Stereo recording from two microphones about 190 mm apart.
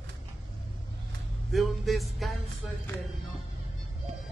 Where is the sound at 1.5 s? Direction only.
Centre (ahead or behind).